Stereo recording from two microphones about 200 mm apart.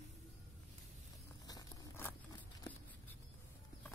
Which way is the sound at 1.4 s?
15° left (ahead or behind).